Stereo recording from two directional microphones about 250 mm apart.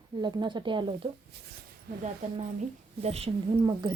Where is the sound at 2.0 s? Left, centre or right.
Right.